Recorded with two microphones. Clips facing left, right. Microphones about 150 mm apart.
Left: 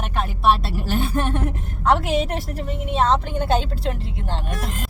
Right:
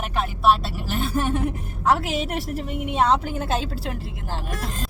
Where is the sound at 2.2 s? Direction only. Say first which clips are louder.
Even; 35° left (ahead or behind).